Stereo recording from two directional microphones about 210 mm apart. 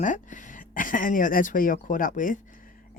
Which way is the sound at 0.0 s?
35° left (ahead or behind).